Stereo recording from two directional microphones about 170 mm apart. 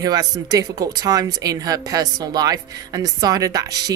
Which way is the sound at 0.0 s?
20° right (ahead or behind).